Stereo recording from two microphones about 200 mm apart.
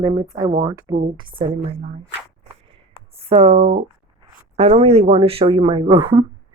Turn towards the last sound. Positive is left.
turn(degrees=-25)  # may be behind; listen again after turning